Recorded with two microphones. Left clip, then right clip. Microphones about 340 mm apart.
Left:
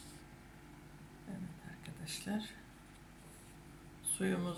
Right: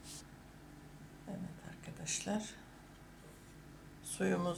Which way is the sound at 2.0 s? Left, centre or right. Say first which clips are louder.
Right 4 dB; centre.